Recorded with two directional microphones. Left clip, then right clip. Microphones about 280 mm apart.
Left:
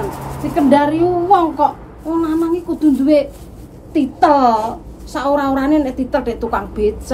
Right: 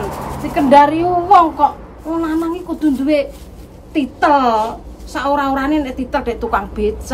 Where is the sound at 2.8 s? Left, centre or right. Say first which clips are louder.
Left 2 dB; centre.